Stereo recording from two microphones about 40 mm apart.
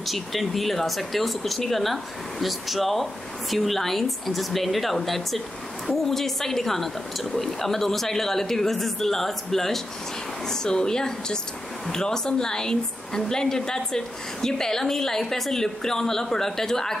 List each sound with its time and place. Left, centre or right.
0.0 s a woman's voice: centre